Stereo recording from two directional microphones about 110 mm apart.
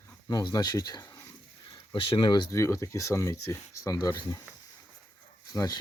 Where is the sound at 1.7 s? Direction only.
50° left (ahead or behind).